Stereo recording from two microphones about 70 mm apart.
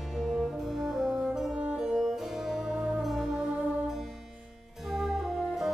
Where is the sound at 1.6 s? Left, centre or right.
Centre.